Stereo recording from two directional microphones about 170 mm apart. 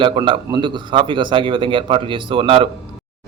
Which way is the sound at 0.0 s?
30° right (ahead or behind).